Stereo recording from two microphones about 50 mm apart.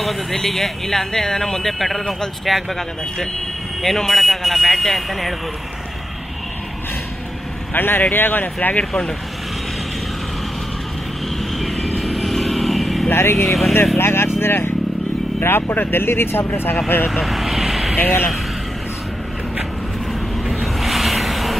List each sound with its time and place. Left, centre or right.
0.0 s speech: centre
7.7 s speech: left
8.5 s speech: left
11.5 s vehicle: centre
13.1 s speech: left
13.5 s speech: centre
13.9 s speech: left
17.1 s vehicle: centre
17.9 s speech: left
20.1 s vehicle: centre